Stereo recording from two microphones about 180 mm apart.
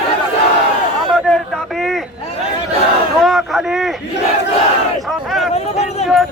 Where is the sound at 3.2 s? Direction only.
Centre (ahead or behind).